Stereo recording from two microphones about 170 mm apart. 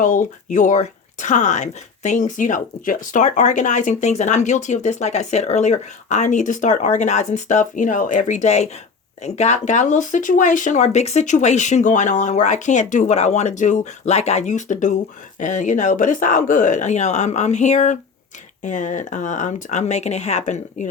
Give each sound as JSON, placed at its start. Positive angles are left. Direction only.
{"t": 0.0, "sound": "speech", "side_deg": 50}